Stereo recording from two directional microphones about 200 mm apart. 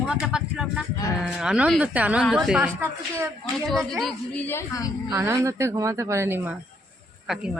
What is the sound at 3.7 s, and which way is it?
A woman's voice, centre (ahead or behind).